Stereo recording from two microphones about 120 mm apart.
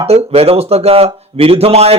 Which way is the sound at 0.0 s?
60° right (ahead or behind).